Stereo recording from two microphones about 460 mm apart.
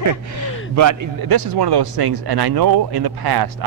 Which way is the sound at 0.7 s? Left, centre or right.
Right.